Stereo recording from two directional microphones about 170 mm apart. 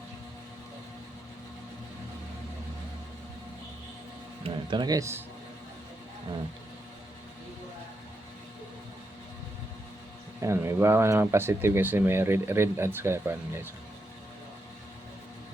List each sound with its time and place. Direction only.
4.4 s speech: 25° right (ahead or behind)
10.4 s speech: 15° right (ahead or behind)